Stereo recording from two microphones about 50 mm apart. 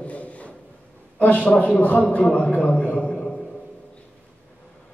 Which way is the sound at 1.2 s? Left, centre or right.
Left.